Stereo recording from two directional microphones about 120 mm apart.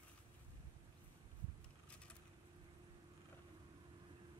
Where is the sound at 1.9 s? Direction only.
10° left (ahead or behind).